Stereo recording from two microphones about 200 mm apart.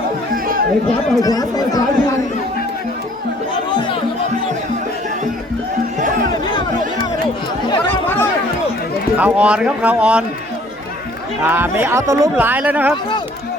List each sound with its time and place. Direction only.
1.2 s speech: 20° left (ahead or behind)
8.0 s chatter: 10° left (ahead or behind)
9.1 s speech: 5° right (ahead or behind)
11.4 s speech: 10° right (ahead or behind)